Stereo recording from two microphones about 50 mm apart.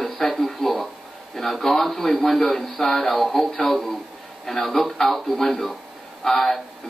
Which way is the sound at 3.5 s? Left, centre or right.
Centre.